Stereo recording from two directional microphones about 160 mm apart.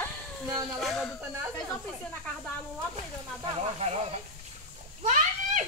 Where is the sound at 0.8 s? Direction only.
Centre (ahead or behind).